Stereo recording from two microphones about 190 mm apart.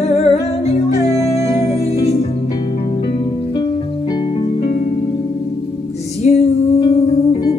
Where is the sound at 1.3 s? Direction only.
35° left (ahead or behind).